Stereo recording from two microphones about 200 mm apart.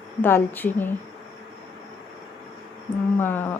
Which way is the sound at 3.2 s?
10° left (ahead or behind).